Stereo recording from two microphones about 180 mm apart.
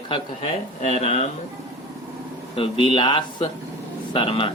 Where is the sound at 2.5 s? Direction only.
30° left (ahead or behind).